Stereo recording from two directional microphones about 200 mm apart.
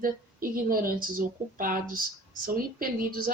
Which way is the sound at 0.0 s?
45° right (ahead or behind).